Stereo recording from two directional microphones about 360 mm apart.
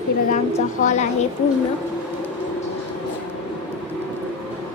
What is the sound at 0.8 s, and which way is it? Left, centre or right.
Speech, left.